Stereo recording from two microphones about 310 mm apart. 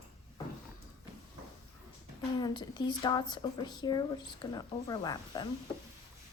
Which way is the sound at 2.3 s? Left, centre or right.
Centre.